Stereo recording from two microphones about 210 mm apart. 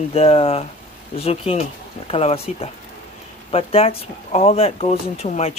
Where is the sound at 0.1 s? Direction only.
30° left (ahead or behind).